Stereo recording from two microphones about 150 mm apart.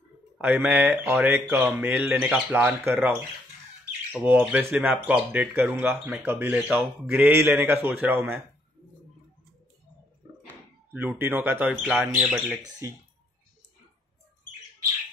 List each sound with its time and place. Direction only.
0.4 s speech: 10° right (ahead or behind)
4.1 s speech: 10° right (ahead or behind)
10.4 s speech: 15° right (ahead or behind)
12.6 s speech: 25° right (ahead or behind)